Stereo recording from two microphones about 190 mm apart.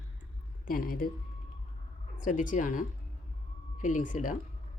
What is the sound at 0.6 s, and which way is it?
Speech, 50° left (ahead or behind).